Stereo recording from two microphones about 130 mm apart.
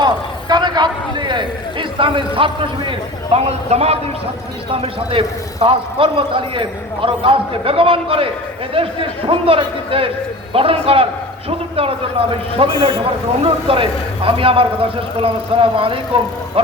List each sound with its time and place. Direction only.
0.0 s a man's voice: 35° right (ahead or behind)